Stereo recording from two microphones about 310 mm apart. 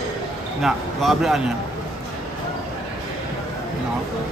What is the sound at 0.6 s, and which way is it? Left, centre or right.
Speech, centre.